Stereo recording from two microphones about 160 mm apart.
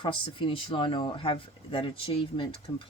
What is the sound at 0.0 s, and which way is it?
Speech, 30° left (ahead or behind).